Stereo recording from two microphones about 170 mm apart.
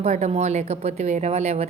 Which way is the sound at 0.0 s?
40° right (ahead or behind).